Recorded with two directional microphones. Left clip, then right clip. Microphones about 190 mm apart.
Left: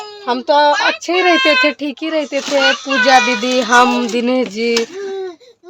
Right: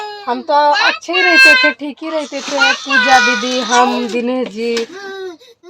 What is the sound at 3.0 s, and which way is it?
Speech, 35° left (ahead or behind).